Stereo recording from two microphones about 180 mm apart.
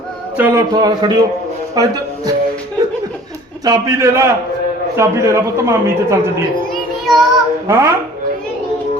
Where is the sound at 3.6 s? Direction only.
15° right (ahead or behind).